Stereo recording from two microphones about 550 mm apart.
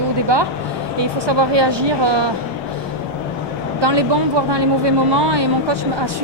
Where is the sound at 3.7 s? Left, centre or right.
Right.